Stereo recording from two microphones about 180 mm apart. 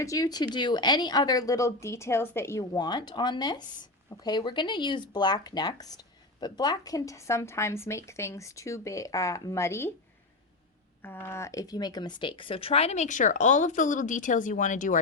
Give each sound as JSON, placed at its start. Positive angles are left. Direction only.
{"t": 0.0, "sound": "speech", "side_deg": 20}
{"t": 11.0, "sound": "speech", "side_deg": 10}